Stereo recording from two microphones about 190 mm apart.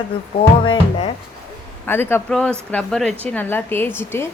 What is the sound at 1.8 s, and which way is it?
Speech, 10° left (ahead or behind).